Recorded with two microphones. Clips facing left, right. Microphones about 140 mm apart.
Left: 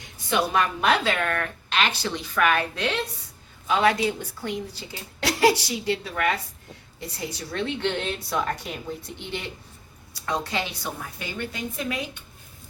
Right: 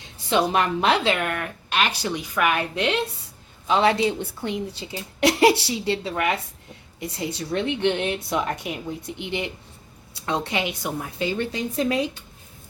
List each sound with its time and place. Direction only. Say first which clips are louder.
0.3 s a woman's voice: right 3 dB; 25° right (ahead or behind)